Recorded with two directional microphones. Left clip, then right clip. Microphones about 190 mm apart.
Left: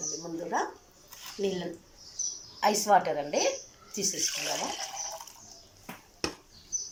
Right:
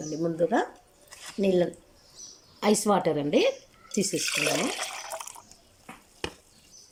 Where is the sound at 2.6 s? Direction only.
55° right (ahead or behind).